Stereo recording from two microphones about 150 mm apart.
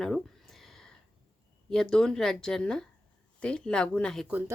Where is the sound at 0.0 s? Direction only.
Centre (ahead or behind).